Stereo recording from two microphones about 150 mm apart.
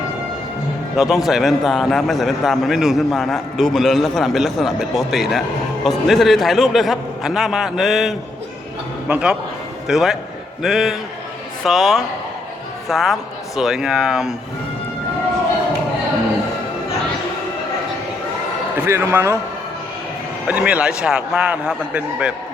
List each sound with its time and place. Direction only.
0.9 s a man's voice: centre (ahead or behind)
18.9 s a man's voice: 15° right (ahead or behind)
20.5 s a man's voice: 10° right (ahead or behind)